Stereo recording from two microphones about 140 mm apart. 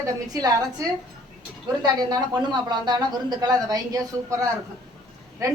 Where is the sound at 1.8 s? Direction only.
25° right (ahead or behind).